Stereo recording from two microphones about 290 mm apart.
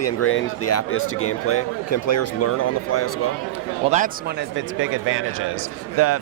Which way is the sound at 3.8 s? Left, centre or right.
Right.